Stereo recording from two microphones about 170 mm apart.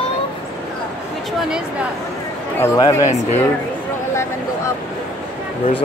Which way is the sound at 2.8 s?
20° left (ahead or behind).